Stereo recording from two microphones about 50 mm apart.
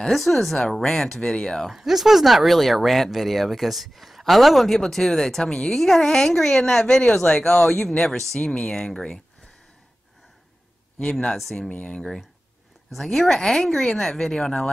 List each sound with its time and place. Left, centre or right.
0.1 s speech: centre
1.7 s speech: centre
11.0 s speech: centre
11.3 s speech: centre
11.7 s speech: left
12.9 s speech: centre